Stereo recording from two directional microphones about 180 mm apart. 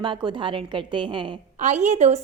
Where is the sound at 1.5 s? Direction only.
40° right (ahead or behind).